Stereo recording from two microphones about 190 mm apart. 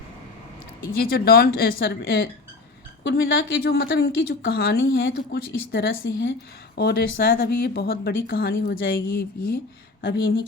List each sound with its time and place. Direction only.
0.9 s a woman's voice: 55° left (ahead or behind)
3.0 s speech: 65° left (ahead or behind)
6.7 s speech: 60° left (ahead or behind)
10.0 s speech: 65° left (ahead or behind)